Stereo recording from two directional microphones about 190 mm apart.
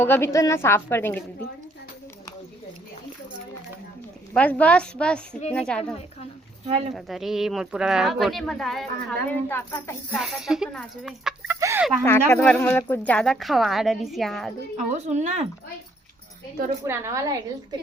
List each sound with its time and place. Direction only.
0.0 s a woman's voice: 10° left (ahead or behind)
4.4 s a woman's voice: 5° left (ahead or behind)
6.7 s speech: 30° right (ahead or behind)
6.9 s speech: centre (ahead or behind)
10.2 s speech: centre (ahead or behind)
11.6 s a sound: 10° right (ahead or behind)
12.0 s speech: 15° left (ahead or behind)
14.8 s speech: 35° right (ahead or behind)
16.8 s a woman's voice: 15° right (ahead or behind)